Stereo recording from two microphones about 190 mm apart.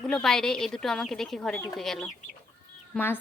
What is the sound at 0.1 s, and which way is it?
A woman's voice, 5° left (ahead or behind).